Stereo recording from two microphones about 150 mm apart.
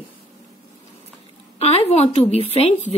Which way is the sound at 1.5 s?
45° left (ahead or behind).